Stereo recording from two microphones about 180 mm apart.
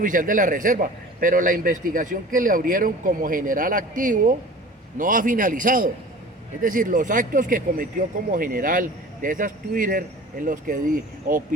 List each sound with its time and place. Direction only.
0.0 s a man's voice: 50° right (ahead or behind)